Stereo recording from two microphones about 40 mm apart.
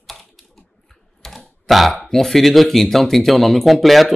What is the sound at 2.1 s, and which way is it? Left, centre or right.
Speech, centre.